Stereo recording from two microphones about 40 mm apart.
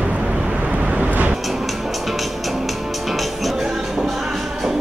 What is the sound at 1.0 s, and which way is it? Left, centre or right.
Vehicle, right.